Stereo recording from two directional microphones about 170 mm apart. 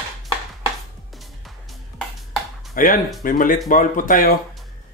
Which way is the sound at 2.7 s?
55° left (ahead or behind).